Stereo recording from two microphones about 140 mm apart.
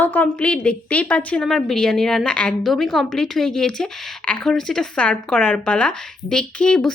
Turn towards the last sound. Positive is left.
turn(degrees=5)  # may be behind; listen again after turning